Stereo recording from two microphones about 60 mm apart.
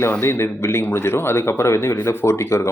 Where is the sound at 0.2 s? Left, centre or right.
Left.